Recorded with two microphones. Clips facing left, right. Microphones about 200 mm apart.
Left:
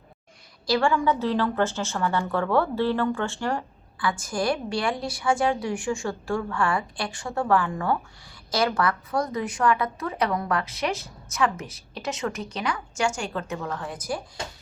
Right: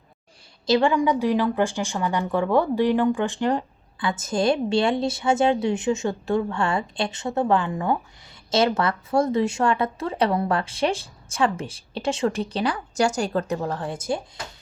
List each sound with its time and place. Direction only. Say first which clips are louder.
0.7 s a woman's voice: right 3 dB; 20° right (ahead or behind)